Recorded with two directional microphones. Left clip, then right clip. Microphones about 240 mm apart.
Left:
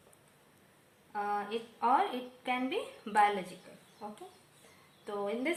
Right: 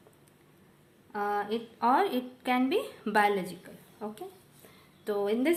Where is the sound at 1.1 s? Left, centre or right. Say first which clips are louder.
Right 4 dB; right.